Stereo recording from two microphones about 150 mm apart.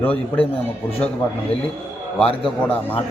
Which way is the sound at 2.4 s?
10° left (ahead or behind).